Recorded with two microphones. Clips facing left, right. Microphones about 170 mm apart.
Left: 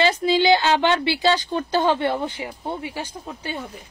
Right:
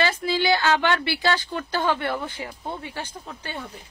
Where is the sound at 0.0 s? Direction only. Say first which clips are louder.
Left 5 dB; 20° left (ahead or behind).